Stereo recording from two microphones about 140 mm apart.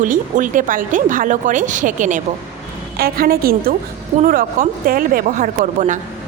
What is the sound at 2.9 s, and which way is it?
A woman's voice, 90° right.